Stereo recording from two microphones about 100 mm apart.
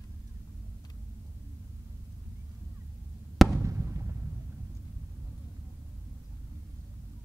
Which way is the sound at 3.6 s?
30° right (ahead or behind).